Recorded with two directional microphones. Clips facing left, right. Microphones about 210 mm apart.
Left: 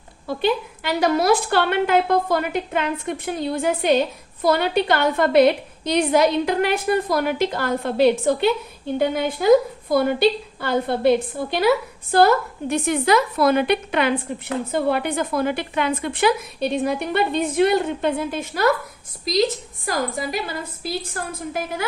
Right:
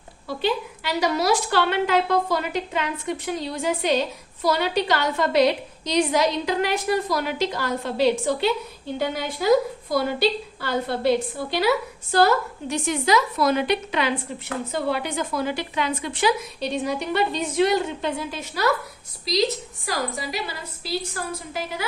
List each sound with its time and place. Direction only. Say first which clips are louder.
0.3 s a woman's voice: left 3 dB; 55° left (ahead or behind)
12.1 s a woman's voice: left 3 dB; 55° left (ahead or behind)